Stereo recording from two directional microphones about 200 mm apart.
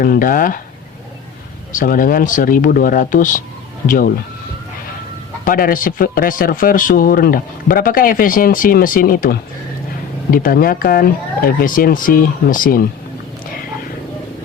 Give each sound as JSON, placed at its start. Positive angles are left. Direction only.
{"t": 0.0, "sound": "speech", "side_deg": 45}
{"t": 1.7, "sound": "speech", "side_deg": 45}
{"t": 5.5, "sound": "speech", "side_deg": 45}